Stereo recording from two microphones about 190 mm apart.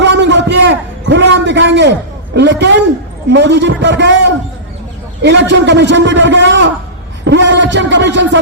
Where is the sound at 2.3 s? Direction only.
65° right (ahead or behind).